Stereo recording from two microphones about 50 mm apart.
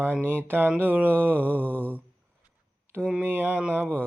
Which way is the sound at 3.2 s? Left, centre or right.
Right.